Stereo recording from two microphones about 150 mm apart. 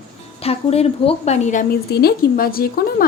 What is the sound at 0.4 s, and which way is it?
A woman's voice, 40° left (ahead or behind).